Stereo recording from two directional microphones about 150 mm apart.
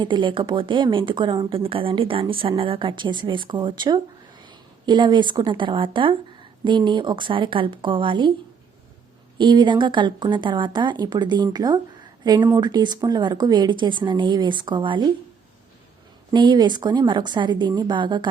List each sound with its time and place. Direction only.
0.0 s speech: 30° right (ahead or behind)
9.4 s a woman's voice: 30° right (ahead or behind)
16.3 s a woman's voice: 30° right (ahead or behind)